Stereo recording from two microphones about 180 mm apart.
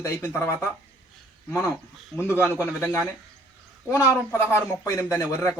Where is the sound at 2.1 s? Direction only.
15° left (ahead or behind).